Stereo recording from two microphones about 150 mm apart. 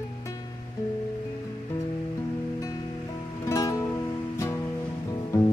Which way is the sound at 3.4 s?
20° left (ahead or behind).